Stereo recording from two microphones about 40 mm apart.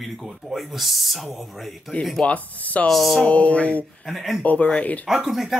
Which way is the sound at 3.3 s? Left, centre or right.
Left.